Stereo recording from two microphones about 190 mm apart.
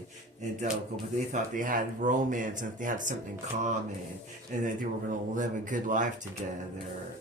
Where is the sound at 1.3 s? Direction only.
45° right (ahead or behind).